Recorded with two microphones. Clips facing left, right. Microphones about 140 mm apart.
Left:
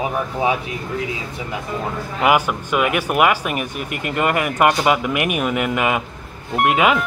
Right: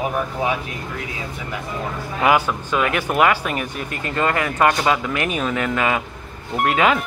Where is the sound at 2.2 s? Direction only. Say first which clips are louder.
Left 1 dB; 10° left (ahead or behind).